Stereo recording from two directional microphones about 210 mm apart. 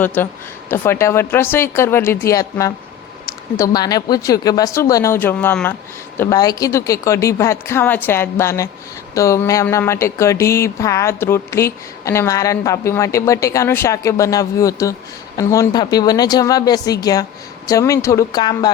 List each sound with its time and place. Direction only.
0.0 s speech: 10° left (ahead or behind)